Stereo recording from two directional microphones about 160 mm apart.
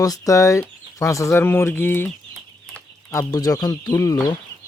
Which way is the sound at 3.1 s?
20° left (ahead or behind).